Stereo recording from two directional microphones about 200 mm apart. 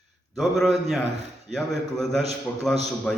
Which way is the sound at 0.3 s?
Centre (ahead or behind).